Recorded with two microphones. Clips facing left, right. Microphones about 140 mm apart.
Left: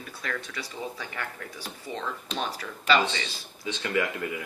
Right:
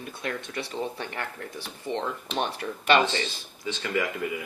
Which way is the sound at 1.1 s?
60° right (ahead or behind).